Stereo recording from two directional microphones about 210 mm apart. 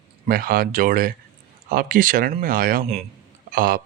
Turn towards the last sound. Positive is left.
turn(degrees=-45)  # may be behind; listen again after turning